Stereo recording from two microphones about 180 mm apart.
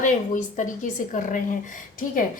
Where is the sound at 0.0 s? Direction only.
45° left (ahead or behind).